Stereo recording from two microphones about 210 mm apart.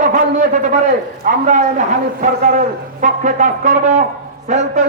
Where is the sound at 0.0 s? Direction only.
35° right (ahead or behind).